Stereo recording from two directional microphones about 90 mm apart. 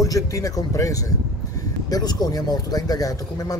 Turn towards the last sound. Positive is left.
turn(degrees=45)  # may be behind; listen again after turning